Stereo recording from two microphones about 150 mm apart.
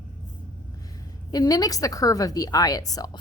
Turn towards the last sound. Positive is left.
turn(degrees=25)  # may be behind; listen again after turning